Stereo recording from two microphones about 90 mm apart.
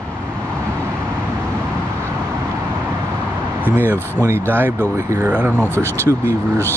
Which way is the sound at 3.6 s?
25° right (ahead or behind).